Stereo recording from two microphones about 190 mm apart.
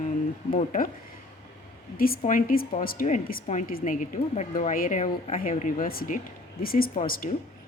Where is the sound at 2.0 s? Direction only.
45° left (ahead or behind).